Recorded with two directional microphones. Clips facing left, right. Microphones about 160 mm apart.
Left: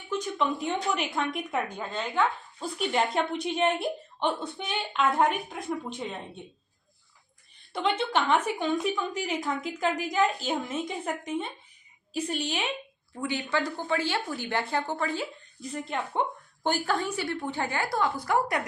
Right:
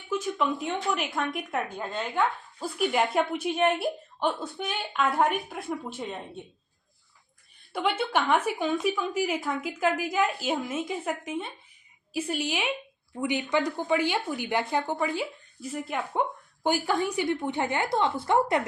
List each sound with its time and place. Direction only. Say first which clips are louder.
0.1 s a woman's voice: right 1 dB; 5° right (ahead or behind)
7.7 s a woman's voice: even; 10° right (ahead or behind); by 18.6 s 25° right (ahead or behind)